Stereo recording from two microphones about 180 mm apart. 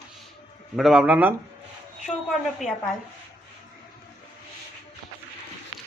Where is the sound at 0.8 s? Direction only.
Centre (ahead or behind).